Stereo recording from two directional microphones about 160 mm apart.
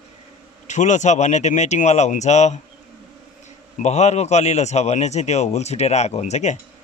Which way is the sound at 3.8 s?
45° left (ahead or behind).